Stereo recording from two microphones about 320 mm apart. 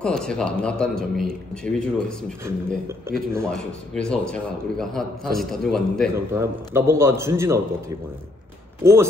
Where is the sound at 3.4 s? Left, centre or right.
Centre.